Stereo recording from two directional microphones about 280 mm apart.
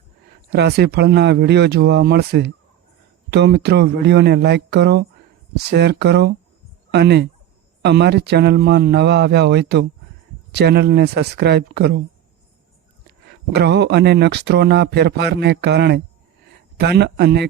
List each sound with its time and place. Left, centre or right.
0.5 s speech: right
13.1 s speech: right